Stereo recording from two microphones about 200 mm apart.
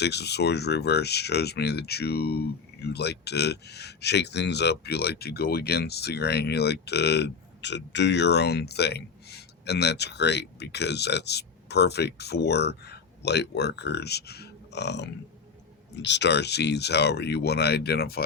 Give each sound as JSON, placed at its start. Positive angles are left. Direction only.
{"t": 0.0, "sound": "speech", "side_deg": 55}